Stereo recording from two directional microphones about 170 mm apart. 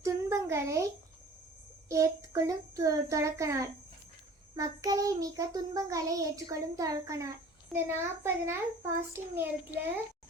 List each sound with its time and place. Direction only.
0.0 s a sound: 15° right (ahead or behind)
1.9 s child singing: 20° right (ahead or behind)
7.7 s a child's voice: 15° right (ahead or behind)